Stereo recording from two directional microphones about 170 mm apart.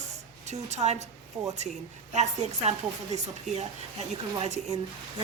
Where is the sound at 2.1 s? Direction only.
45° right (ahead or behind).